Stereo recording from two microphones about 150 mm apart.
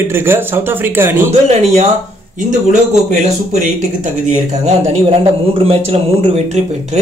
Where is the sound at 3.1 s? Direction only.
55° right (ahead or behind).